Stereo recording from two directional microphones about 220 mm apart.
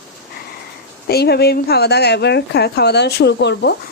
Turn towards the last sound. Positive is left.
turn(degrees=50)  # may be behind; listen again after turning